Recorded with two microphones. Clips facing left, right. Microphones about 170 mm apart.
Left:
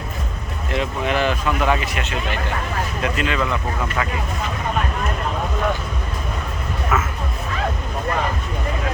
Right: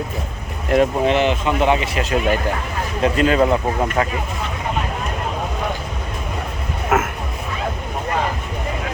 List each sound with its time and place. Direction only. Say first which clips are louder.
0.7 s speech: right 9 dB; 50° right (ahead or behind)
1.0 s speech: right 3 dB; 20° right (ahead or behind); by 4.0 s 35° right (ahead or behind)
6.9 s a sound: right 4 dB; 50° right (ahead or behind)